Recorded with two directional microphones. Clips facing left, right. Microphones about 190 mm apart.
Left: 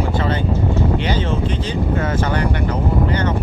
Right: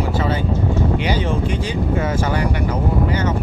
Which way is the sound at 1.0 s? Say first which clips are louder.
Even; 10° right (ahead or behind).